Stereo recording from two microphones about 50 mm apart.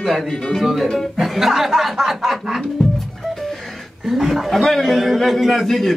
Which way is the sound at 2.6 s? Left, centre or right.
Centre.